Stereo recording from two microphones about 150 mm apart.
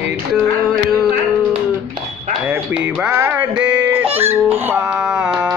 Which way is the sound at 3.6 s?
10° right (ahead or behind).